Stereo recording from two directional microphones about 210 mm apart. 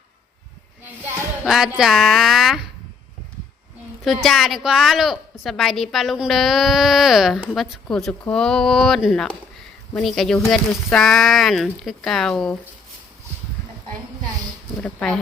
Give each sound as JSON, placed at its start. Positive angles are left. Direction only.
{"t": 1.5, "sound": "a woman's voice", "side_deg": 0}
{"t": 4.0, "sound": "a woman's voice", "side_deg": 0}
{"t": 14.8, "sound": "a woman's voice", "side_deg": 5}